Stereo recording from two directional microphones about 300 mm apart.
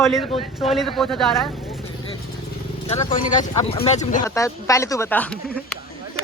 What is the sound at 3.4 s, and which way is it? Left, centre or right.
Speech, centre.